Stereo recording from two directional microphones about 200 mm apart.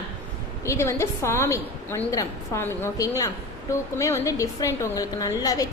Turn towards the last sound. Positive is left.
turn(degrees=20)  # may be behind; listen again after turning